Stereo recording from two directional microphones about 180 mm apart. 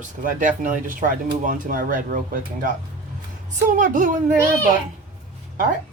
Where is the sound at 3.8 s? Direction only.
45° right (ahead or behind).